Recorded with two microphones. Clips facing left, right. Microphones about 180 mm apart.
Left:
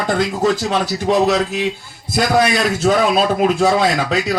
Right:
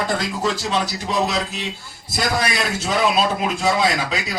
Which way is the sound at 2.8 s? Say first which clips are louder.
Left 5 dB; 50° left (ahead or behind).